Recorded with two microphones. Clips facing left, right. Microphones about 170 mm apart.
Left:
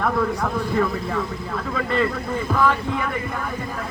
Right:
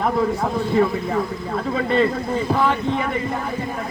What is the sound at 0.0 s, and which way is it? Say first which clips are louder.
Speech: right 2 dB; 25° right (ahead or behind).